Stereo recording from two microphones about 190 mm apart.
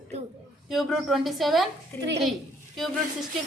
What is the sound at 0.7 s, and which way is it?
Speech, centre (ahead or behind).